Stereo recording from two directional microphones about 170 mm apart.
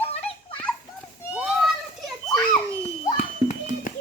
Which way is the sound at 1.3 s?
5° right (ahead or behind).